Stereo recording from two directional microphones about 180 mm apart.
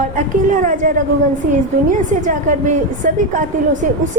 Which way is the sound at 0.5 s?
45° right (ahead or behind).